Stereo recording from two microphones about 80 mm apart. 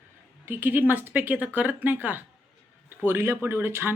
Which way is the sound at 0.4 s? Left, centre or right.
Right.